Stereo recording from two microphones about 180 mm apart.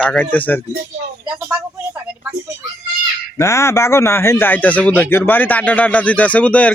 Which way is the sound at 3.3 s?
15° left (ahead or behind).